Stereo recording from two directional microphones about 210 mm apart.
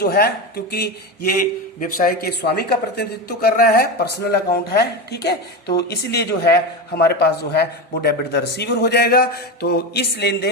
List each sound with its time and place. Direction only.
0.0 s a man's voice: 45° left (ahead or behind)